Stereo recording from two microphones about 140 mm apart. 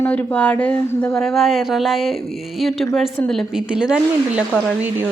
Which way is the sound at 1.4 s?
Centre (ahead or behind).